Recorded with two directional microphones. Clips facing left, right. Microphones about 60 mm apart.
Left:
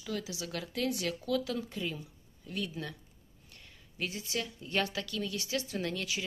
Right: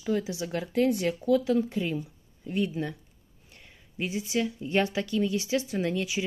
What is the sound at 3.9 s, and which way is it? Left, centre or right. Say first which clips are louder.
Speech: right 7 dB; centre.